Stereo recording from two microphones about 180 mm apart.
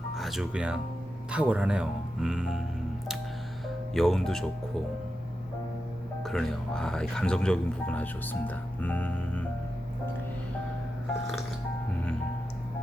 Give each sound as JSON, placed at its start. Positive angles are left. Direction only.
{"t": 0.2, "sound": "speech", "side_deg": 0}
{"t": 3.9, "sound": "speech", "side_deg": 0}
{"t": 6.2, "sound": "speech", "side_deg": 0}